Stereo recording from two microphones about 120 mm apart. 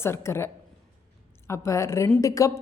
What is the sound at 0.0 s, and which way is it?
A woman's voice, 20° left (ahead or behind).